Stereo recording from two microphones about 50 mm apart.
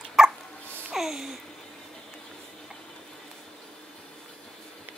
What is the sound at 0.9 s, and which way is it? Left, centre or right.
Babbling, centre.